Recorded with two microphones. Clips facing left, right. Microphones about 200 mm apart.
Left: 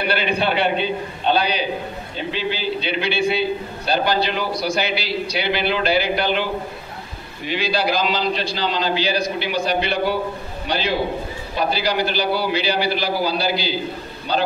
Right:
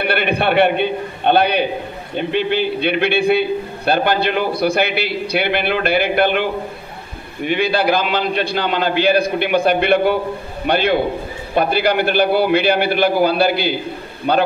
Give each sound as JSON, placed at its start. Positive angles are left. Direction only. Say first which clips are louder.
{"t": 0.0, "sound": "a man's voice", "louder": "right 3 dB", "side_deg": -55}
{"t": 7.4, "sound": "a man's voice", "louder": "right 5 dB", "side_deg": -55}